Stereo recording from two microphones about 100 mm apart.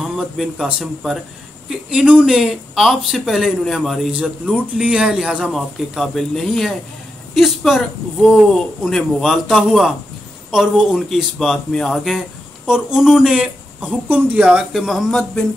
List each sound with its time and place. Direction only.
0.0 s speech: 5° right (ahead or behind)
14.0 s speech: 20° right (ahead or behind)
14.4 s speech: 10° right (ahead or behind)